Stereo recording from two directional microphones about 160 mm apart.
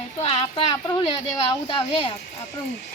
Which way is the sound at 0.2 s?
40° left (ahead or behind).